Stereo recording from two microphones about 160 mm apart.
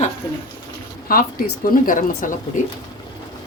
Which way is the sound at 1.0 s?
65° left (ahead or behind).